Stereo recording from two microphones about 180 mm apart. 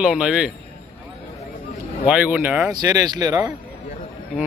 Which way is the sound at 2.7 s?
20° right (ahead or behind).